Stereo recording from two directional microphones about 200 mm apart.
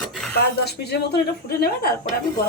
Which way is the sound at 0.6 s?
55° left (ahead or behind).